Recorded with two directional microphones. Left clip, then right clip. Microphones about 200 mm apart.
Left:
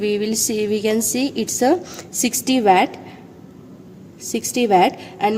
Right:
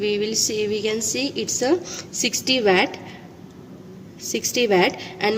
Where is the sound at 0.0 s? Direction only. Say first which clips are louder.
Left 1 dB; 40° left (ahead or behind).